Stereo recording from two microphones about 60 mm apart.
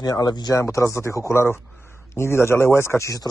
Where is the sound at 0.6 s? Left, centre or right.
Left.